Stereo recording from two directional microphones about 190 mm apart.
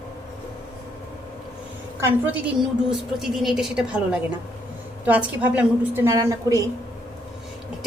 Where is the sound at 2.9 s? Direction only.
Centre (ahead or behind).